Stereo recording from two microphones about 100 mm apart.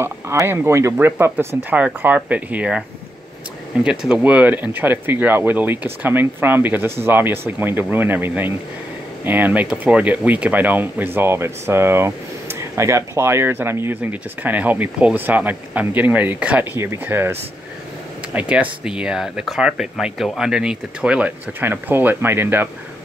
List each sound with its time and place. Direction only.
0.0 s speech: 25° right (ahead or behind)
3.8 s speech: 5° right (ahead or behind)
16.7 s speech: 25° right (ahead or behind)